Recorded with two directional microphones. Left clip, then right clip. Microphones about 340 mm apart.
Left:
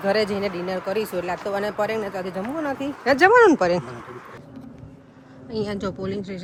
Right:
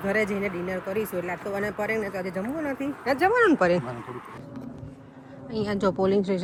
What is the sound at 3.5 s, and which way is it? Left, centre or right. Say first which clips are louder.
Speech: left 3 dB; centre.